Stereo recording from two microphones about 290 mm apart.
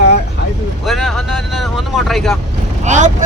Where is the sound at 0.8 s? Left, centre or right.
Centre.